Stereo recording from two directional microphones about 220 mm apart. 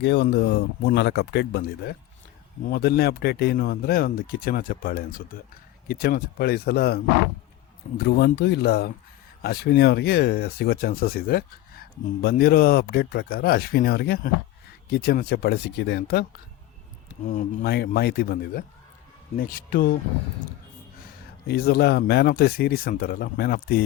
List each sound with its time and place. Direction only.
0.0 s speech: 50° left (ahead or behind)
17.2 s speech: 35° left (ahead or behind)
17.7 s speech: 45° left (ahead or behind)
21.4 s speech: 45° left (ahead or behind)